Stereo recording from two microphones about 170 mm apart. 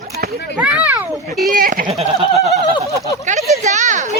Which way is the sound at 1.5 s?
60° right (ahead or behind).